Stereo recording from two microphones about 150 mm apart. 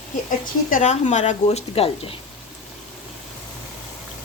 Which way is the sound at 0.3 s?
55° left (ahead or behind).